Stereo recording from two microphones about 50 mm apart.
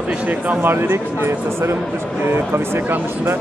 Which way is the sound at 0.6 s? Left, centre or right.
Right.